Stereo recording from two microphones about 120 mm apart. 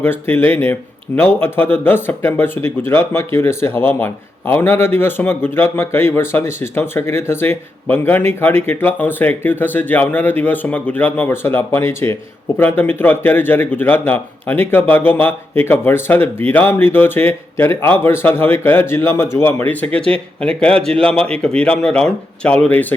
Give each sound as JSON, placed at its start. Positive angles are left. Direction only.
{"t": 0.0, "sound": "speech", "side_deg": 15}